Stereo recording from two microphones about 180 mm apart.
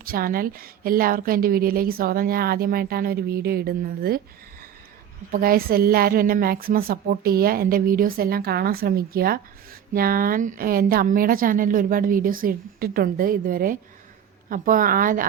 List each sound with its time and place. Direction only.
0.0 s a woman's voice: 55° right (ahead or behind)
5.3 s a woman's voice: 55° right (ahead or behind)